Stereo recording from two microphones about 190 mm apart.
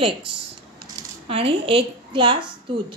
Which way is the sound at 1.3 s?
30° right (ahead or behind).